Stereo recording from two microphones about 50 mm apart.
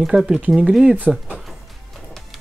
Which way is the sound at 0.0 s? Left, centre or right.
Centre.